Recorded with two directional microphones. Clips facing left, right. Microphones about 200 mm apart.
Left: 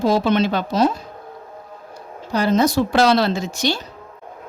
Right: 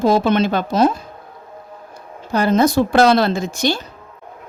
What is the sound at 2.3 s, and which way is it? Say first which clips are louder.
A woman's voice: right 2 dB; 55° right (ahead or behind).